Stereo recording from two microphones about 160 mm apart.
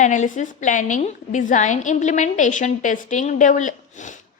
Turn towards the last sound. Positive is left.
turn(degrees=50)  # may be behind; listen again after turning